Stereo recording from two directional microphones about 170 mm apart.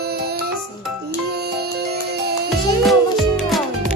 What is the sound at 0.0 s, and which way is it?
Music, 70° right (ahead or behind).